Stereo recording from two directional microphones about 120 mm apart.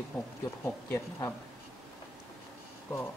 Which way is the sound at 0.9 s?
20° left (ahead or behind).